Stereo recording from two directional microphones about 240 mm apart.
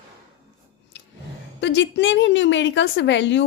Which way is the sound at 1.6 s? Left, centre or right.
Left.